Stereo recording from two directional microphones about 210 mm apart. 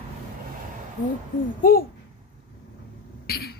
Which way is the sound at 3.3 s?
45° left (ahead or behind).